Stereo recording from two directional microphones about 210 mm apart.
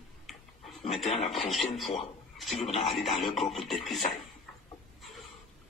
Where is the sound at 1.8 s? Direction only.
25° left (ahead or behind).